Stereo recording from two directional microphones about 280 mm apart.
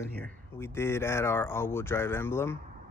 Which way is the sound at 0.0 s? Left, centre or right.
Centre.